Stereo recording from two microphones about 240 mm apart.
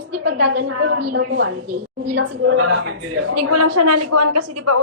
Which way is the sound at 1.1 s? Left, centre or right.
Right.